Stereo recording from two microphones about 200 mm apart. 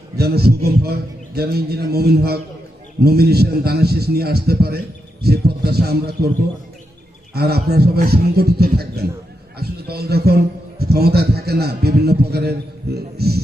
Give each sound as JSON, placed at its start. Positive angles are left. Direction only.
{"t": 0.2, "sound": "a man's voice", "side_deg": -50}
{"t": 7.3, "sound": "a man's voice", "side_deg": -50}